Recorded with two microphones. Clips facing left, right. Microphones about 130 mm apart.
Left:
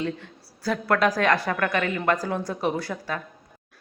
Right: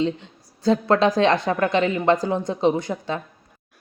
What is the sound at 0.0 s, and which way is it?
Speech, 20° right (ahead or behind).